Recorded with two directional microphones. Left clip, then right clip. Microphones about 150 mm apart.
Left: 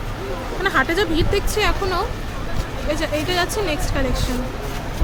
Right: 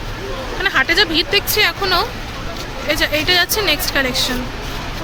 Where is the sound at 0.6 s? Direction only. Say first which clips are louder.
Right 4 dB; 15° left (ahead or behind).